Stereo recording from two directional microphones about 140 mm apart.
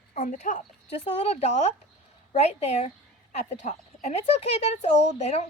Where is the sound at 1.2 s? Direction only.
50° left (ahead or behind).